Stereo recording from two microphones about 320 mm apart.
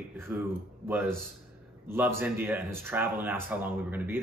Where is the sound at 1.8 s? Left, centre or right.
Centre.